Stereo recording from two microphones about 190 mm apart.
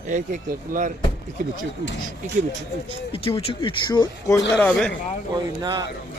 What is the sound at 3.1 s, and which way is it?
Speech, 30° left (ahead or behind).